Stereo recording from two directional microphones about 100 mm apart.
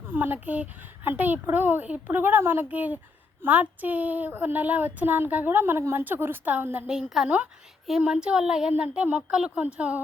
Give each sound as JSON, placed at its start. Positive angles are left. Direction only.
{"t": 0.0, "sound": "speech", "side_deg": -20}